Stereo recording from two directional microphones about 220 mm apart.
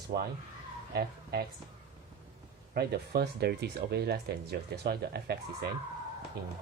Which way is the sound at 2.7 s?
45° right (ahead or behind).